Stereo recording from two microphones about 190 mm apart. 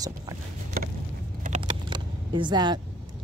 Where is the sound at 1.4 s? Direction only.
35° right (ahead or behind).